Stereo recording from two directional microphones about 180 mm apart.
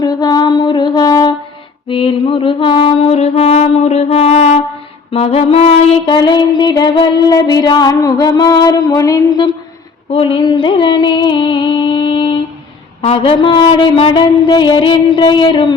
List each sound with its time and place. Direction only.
0.0 s music: 20° left (ahead or behind)
1.9 s mantra: 30° left (ahead or behind)
5.1 s female singing: 35° left (ahead or behind)
10.1 s a sound: 30° left (ahead or behind)
13.0 s female singing: 30° left (ahead or behind)